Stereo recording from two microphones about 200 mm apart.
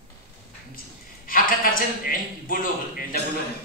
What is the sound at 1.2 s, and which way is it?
A man's voice, 45° left (ahead or behind).